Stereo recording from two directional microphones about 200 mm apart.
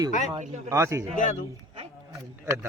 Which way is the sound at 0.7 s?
15° right (ahead or behind).